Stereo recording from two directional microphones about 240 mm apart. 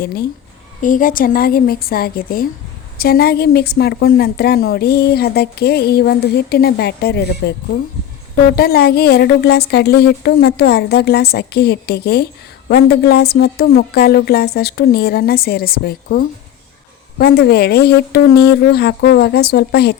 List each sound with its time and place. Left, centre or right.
0.0 s a woman's voice: left
8.5 s a woman's voice: left